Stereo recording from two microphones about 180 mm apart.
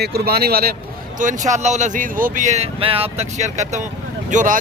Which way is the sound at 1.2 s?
45° right (ahead or behind).